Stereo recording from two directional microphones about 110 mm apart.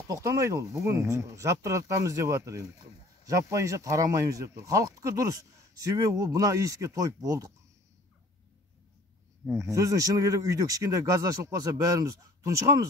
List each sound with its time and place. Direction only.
0.1 s speech: 30° right (ahead or behind)
9.6 s speech: 30° right (ahead or behind)